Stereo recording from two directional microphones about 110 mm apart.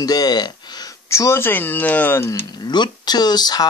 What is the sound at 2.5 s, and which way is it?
Speech, 45° left (ahead or behind).